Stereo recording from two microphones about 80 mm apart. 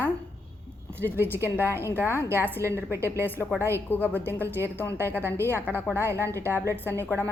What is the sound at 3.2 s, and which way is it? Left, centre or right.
A woman's voice, left.